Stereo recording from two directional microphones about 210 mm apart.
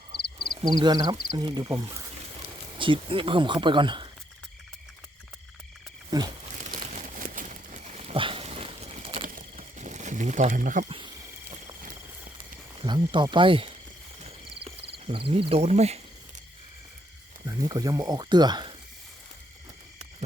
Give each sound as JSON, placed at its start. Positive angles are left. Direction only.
{"t": 0.6, "sound": "speech", "side_deg": -20}
{"t": 6.1, "sound": "a sound", "side_deg": -20}
{"t": 6.8, "sound": "a sound", "side_deg": -35}
{"t": 9.2, "sound": "crumpling", "side_deg": -35}
{"t": 12.8, "sound": "speech", "side_deg": -20}
{"t": 15.0, "sound": "speech", "side_deg": -25}
{"t": 17.4, "sound": "speech", "side_deg": -15}